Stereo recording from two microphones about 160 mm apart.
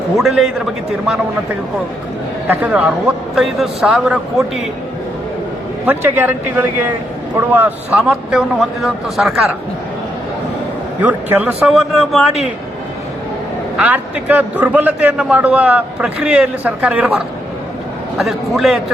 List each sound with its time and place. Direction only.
0.2 s a man's voice: centre (ahead or behind)
2.6 s a man's voice: centre (ahead or behind)
5.8 s a man's voice: 10° right (ahead or behind)
11.0 s a man's voice: 10° right (ahead or behind)
11.7 s a man's voice: centre (ahead or behind)
13.7 s a man's voice: 10° right (ahead or behind)